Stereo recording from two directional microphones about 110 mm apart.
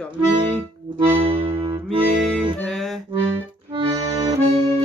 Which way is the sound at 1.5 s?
45° right (ahead or behind).